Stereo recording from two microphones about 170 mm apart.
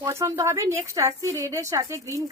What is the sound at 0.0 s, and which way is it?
Speech, 15° right (ahead or behind).